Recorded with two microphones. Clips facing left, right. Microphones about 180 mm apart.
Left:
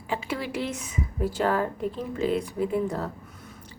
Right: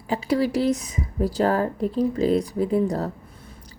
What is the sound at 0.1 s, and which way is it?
Speech, 35° right (ahead or behind).